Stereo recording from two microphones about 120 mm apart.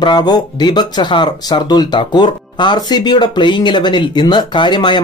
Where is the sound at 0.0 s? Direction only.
35° left (ahead or behind).